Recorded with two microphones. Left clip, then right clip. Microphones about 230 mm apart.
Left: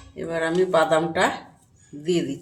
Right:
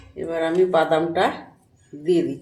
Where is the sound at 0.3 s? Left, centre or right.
Left.